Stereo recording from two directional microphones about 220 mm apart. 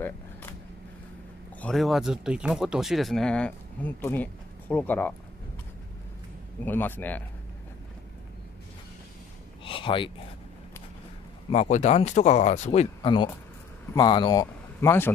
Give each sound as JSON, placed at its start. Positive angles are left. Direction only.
{"t": 0.0, "sound": "vehicle", "side_deg": 10}
{"t": 1.6, "sound": "speech", "side_deg": 0}
{"t": 6.6, "sound": "speech", "side_deg": 10}
{"t": 9.7, "sound": "a sound", "side_deg": 25}
{"t": 11.5, "sound": "speech", "side_deg": 30}